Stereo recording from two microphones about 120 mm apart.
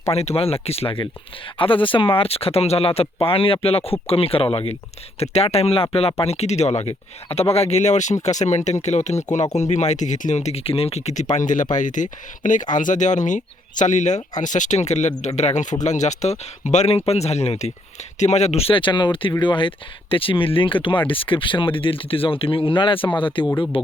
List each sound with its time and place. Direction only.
0.1 s speech: 55° left (ahead or behind)
5.3 s speech: 60° left (ahead or behind)
11.3 s speech: 90° left; by 23.9 s 50° left (ahead or behind)